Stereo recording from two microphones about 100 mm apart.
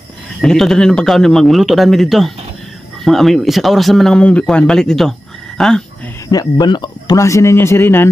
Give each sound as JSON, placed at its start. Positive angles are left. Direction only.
{"t": 0.4, "sound": "speech", "side_deg": 5}
{"t": 6.2, "sound": "speech", "side_deg": 40}
{"t": 7.2, "sound": "speech", "side_deg": 30}